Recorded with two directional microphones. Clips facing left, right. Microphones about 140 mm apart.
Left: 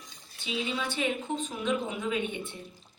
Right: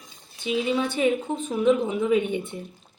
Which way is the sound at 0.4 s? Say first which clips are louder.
Right 8 dB; 55° right (ahead or behind).